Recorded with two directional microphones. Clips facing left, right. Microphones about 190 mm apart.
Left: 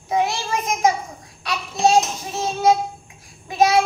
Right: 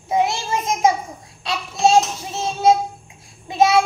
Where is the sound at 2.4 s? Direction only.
25° right (ahead or behind).